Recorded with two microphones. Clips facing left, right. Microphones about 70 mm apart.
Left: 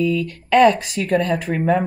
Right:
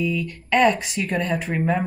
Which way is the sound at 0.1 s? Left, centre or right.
Left.